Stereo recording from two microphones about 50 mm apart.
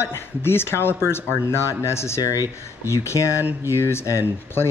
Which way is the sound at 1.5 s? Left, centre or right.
Left.